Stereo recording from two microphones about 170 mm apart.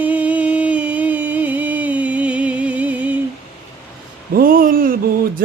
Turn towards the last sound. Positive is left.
turn(degrees=-55)  # may be behind; listen again after turning